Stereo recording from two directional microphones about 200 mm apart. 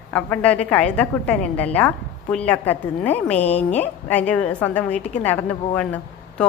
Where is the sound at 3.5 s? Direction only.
35° left (ahead or behind).